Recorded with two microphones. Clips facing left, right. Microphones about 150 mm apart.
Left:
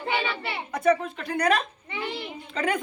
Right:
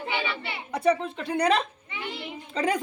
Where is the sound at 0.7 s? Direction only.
30° right (ahead or behind).